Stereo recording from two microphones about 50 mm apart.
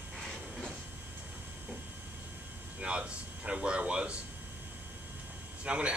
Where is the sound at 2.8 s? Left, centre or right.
Right.